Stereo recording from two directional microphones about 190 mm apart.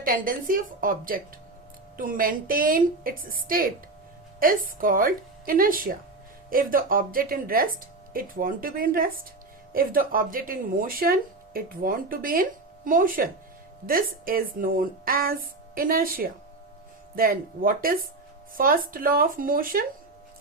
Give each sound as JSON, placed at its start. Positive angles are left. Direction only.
{"t": 0.0, "sound": "speech", "side_deg": -45}